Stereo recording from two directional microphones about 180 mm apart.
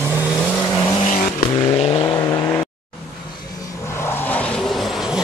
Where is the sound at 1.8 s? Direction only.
30° left (ahead or behind).